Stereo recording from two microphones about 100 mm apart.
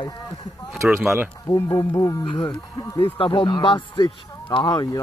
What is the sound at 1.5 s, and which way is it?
Speech, 35° left (ahead or behind).